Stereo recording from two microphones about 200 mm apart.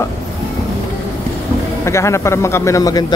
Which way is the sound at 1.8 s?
15° left (ahead or behind).